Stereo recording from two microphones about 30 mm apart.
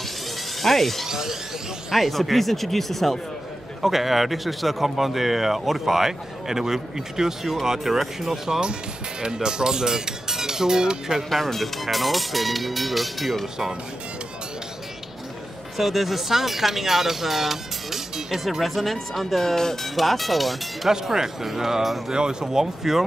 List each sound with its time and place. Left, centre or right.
0.6 s speech: centre
1.0 s speech: centre
1.9 s speech: centre
3.8 s speech: centre
9.2 s speech: right
11.2 s speech: centre
15.8 s speech: centre
20.0 s speech: centre
20.9 s speech: centre
22.1 s speech: right